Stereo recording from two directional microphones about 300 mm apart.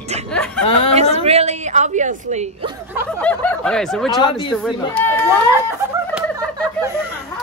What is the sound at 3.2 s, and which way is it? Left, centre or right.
Speech, centre.